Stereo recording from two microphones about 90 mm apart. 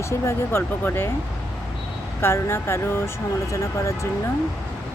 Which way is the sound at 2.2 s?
30° left (ahead or behind).